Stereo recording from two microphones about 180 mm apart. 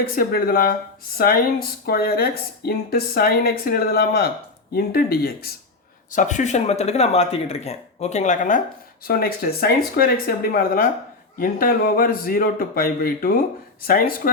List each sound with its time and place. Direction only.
0.2 s speech: 55° left (ahead or behind)
6.1 s speech: 45° left (ahead or behind)
9.0 s a man's voice: 55° left (ahead or behind)